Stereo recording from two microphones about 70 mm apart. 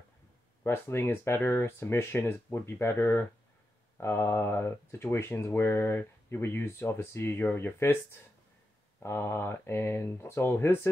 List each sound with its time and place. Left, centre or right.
0.7 s speech: left
9.0 s speech: left